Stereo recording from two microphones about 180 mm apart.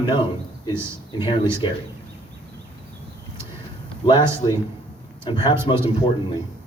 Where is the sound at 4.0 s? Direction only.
30° left (ahead or behind).